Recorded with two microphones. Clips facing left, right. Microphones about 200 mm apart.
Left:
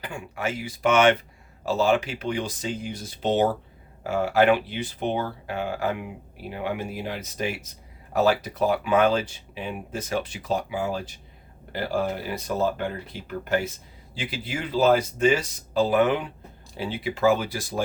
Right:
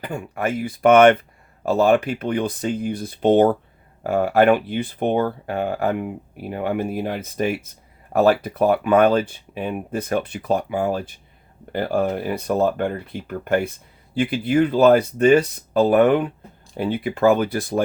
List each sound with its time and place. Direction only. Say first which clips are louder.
0.0 s speech: right 5 dB; 55° right (ahead or behind)